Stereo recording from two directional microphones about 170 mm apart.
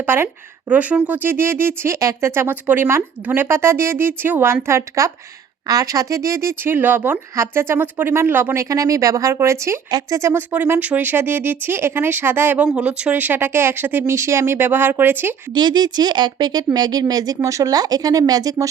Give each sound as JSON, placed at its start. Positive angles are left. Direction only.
{"t": 0.0, "sound": "speech", "side_deg": -15}
{"t": 15.5, "sound": "speech", "side_deg": -25}